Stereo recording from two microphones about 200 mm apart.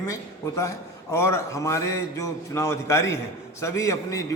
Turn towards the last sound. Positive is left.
turn(degrees=15)  # may be behind; listen again after turning